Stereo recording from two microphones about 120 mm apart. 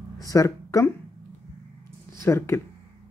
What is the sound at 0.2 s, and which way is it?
Speech, 30° left (ahead or behind).